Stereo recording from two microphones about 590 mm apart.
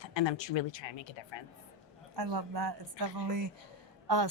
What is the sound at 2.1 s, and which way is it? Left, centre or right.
A woman's voice, right.